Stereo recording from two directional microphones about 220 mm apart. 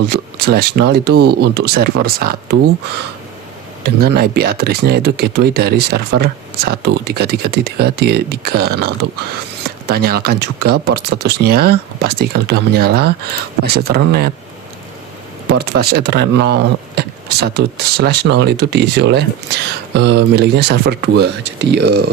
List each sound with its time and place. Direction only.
0.1 s speech: 45° right (ahead or behind)
3.8 s speech: 45° right (ahead or behind)
15.4 s speech: 45° right (ahead or behind)